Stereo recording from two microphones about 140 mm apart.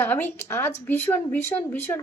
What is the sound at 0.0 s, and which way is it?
Speech, 15° left (ahead or behind).